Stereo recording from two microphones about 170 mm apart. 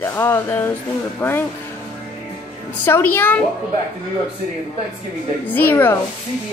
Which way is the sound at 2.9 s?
15° left (ahead or behind).